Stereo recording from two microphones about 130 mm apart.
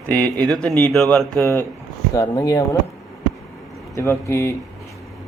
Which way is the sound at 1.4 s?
20° left (ahead or behind).